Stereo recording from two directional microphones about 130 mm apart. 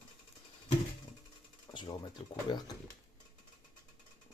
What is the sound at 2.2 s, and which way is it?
Speech, 45° left (ahead or behind).